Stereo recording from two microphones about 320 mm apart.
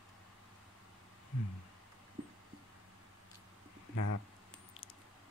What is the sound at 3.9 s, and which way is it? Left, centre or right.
Speech, left.